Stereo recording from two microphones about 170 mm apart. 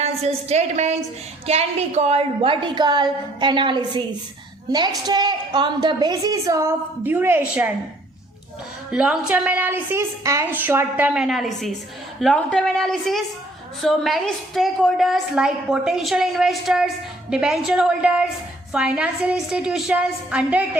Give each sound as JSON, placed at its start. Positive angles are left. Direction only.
{"t": 0.0, "sound": "a woman's voice", "side_deg": -40}
{"t": 8.9, "sound": "a woman's voice", "side_deg": -5}